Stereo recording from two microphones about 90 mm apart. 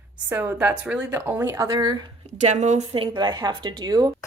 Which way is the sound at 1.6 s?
50° right (ahead or behind).